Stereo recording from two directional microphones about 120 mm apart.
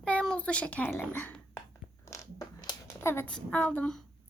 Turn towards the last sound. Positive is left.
turn(degrees=10)  # may be behind; listen again after turning